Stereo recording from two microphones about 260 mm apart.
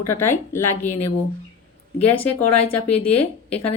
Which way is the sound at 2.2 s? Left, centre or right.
Left.